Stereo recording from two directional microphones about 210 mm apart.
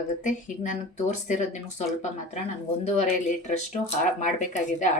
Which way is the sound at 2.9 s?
35° left (ahead or behind).